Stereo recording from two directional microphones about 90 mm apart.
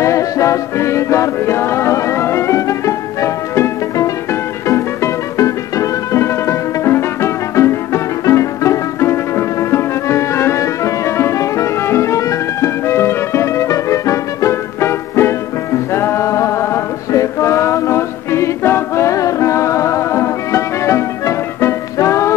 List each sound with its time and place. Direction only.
0.0 s music: 35° left (ahead or behind)